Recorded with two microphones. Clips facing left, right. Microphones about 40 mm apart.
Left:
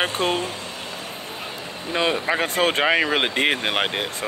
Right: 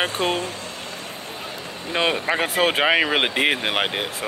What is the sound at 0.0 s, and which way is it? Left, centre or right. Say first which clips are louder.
Speech: even; centre.